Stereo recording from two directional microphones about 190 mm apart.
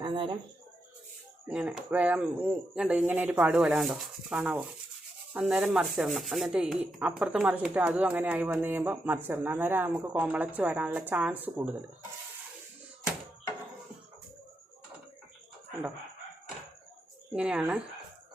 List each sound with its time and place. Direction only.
0.0 s a sound: 25° right (ahead or behind)
1.5 s speech: 5° right (ahead or behind)
5.3 s sanding: 5° right (ahead or behind)
7.0 s speech: 5° right (ahead or behind)
17.3 s sanding: 5° right (ahead or behind)